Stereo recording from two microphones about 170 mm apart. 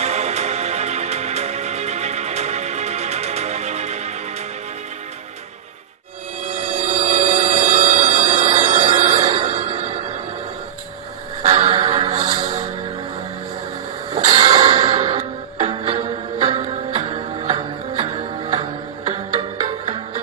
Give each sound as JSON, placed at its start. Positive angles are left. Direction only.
{"t": 0.0, "sound": "music", "side_deg": -40}
{"t": 7.0, "sound": "music", "side_deg": -35}
{"t": 11.6, "sound": "music", "side_deg": -40}
{"t": 14.1, "sound": "music", "side_deg": -35}